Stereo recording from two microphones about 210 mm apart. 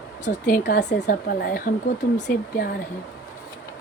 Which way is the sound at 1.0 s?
40° left (ahead or behind).